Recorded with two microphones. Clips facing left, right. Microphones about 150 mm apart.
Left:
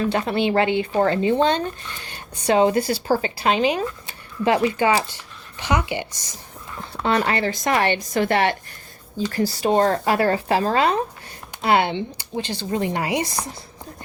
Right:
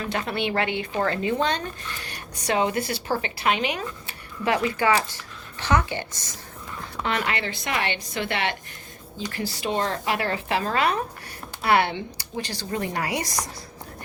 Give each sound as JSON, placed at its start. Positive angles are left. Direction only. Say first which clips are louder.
{"t": 0.1, "sound": "speech", "louder": "left 6 dB", "side_deg": 30}
{"t": 5.5, "sound": "speech", "louder": "left 1 dB", "side_deg": 15}
{"t": 7.0, "sound": "speech", "louder": "left 6 dB", "side_deg": 35}